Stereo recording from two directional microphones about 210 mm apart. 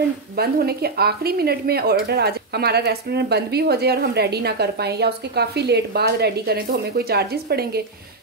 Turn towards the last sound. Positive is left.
turn(degrees=-50)  # may be behind; listen again after turning